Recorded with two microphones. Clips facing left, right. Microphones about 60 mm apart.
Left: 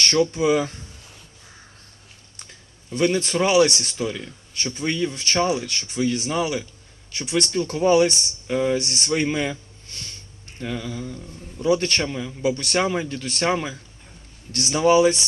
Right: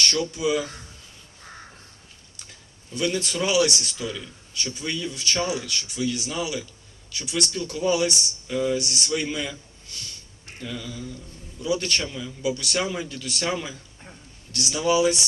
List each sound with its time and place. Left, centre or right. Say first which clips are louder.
0.0 s a man's voice: left 5 dB; left
2.9 s a man's voice: left 5 dB; left